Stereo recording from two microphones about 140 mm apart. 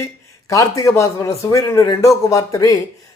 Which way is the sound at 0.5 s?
20° left (ahead or behind).